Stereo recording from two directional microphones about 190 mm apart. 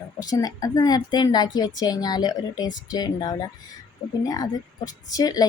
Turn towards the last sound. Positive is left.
turn(degrees=20)  # may be behind; listen again after turning